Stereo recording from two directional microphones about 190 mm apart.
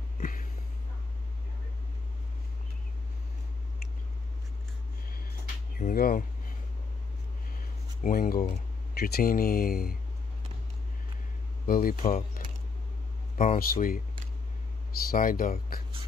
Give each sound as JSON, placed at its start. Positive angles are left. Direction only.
{"t": 0.2, "sound": "a sound", "side_deg": 45}
{"t": 5.8, "sound": "speech", "side_deg": 50}
{"t": 8.0, "sound": "speech", "side_deg": 45}
{"t": 11.6, "sound": "speech", "side_deg": 50}
{"t": 13.4, "sound": "speech", "side_deg": 45}
{"t": 15.0, "sound": "speech", "side_deg": 45}